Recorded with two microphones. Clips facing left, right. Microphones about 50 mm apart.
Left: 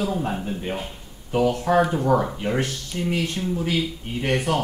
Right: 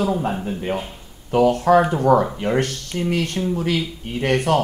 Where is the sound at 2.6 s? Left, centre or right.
Right.